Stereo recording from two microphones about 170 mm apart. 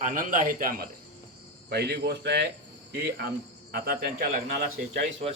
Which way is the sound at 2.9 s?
65° right (ahead or behind).